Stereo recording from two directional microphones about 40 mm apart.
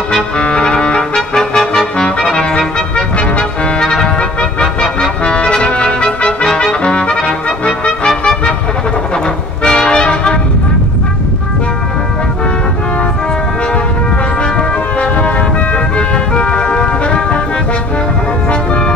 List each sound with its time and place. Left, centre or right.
0.4 s trumpet: left
2.2 s music: centre
3.8 s music: centre
4.4 s trumpet: left
9.6 s music: left
14.6 s music: left